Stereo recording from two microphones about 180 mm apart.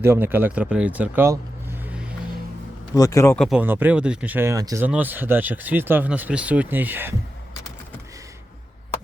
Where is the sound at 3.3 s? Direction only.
5° left (ahead or behind).